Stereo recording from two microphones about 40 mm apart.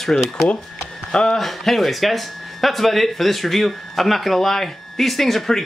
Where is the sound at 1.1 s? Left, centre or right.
Centre.